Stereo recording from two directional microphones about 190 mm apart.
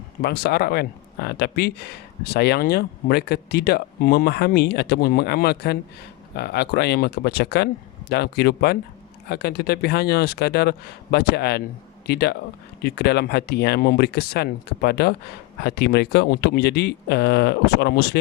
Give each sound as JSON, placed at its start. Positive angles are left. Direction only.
{"t": 0.2, "sound": "speech", "side_deg": 55}